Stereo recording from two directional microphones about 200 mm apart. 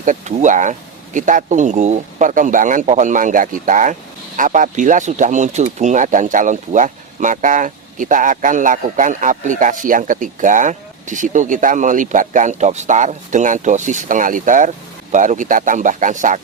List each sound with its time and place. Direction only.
0.0 s speech: 40° right (ahead or behind)